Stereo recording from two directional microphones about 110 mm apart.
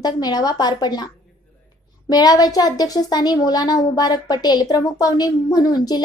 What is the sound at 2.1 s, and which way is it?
Speech, 35° left (ahead or behind).